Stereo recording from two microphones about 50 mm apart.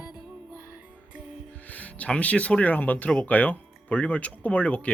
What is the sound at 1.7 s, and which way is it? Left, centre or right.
Speech, left.